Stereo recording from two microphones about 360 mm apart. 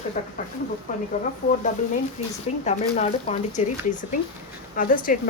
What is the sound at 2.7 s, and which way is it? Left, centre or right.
Speech, centre.